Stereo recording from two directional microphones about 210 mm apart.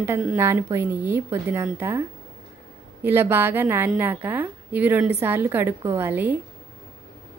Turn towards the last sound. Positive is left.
turn(degrees=-10)  # may be behind; listen again after turning